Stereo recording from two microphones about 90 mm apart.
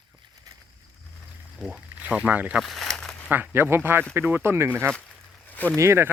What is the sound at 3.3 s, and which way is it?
Speech, 20° right (ahead or behind).